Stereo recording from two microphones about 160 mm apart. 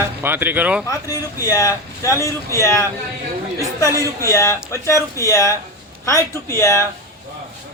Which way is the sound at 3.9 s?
20° right (ahead or behind).